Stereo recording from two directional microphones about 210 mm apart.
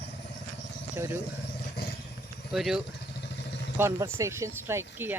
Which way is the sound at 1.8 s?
50° left (ahead or behind).